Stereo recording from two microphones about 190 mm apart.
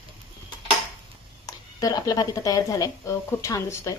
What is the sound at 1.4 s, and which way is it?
A woman's voice, 20° left (ahead or behind).